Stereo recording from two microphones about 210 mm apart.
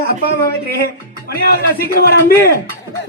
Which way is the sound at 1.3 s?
45° left (ahead or behind).